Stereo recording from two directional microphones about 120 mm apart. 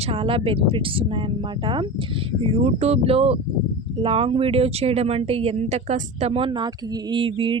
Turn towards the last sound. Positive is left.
turn(degrees=-45)  # may be behind; listen again after turning